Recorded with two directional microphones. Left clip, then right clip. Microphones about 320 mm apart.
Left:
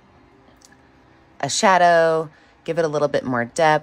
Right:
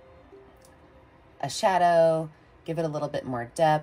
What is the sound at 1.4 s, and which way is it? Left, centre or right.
Speech, left.